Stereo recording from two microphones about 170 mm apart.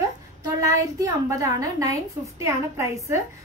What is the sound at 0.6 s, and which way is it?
A woman's voice, 20° right (ahead or behind).